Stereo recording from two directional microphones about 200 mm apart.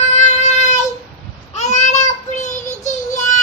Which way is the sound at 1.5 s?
35° left (ahead or behind).